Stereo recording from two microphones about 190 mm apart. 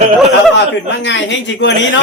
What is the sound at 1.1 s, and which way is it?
Speech, 70° left (ahead or behind).